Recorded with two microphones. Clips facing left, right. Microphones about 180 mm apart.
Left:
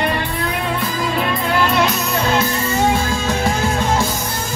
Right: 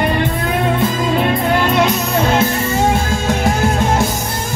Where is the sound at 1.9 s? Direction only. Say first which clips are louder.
Right 3 dB; 25° right (ahead or behind).